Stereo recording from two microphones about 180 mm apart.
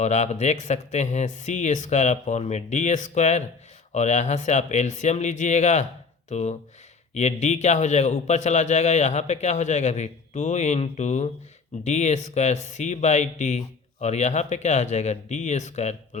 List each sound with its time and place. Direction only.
0.0 s a man's voice: 40° left (ahead or behind)